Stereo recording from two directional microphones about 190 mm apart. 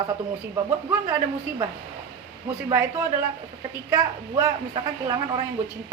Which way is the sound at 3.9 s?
20° right (ahead or behind).